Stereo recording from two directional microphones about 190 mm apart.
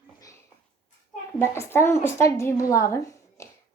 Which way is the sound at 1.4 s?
15° left (ahead or behind).